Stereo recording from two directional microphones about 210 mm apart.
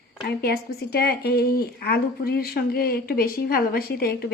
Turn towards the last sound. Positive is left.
turn(degrees=45)  # may be behind; listen again after turning